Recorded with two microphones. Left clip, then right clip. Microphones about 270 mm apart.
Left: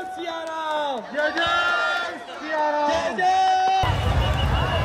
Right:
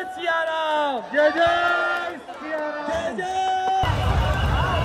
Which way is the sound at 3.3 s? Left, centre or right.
Left.